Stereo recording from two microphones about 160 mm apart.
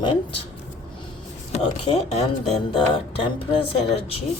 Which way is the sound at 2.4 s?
40° left (ahead or behind).